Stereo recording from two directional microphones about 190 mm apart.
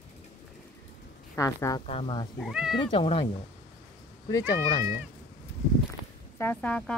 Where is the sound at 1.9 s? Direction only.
30° left (ahead or behind).